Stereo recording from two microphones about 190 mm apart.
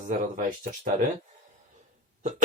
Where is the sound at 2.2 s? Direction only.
40° right (ahead or behind).